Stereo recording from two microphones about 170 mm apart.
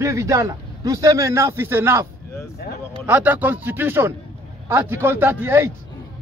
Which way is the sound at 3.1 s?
10° right (ahead or behind).